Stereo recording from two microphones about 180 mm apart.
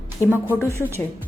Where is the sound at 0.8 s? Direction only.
15° right (ahead or behind).